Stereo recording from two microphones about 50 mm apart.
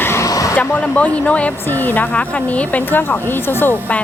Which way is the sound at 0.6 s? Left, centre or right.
Left.